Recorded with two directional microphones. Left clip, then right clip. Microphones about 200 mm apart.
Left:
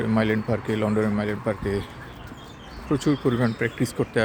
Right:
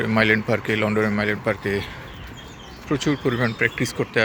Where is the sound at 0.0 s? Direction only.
10° left (ahead or behind).